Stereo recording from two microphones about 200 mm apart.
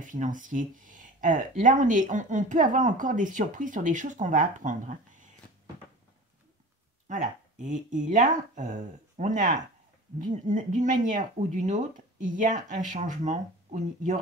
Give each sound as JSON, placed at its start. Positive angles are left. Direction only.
{"t": 0.0, "sound": "speech", "side_deg": -40}
{"t": 7.1, "sound": "speech", "side_deg": -35}